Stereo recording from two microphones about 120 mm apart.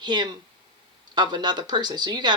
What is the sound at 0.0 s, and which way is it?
Speech, 35° right (ahead or behind).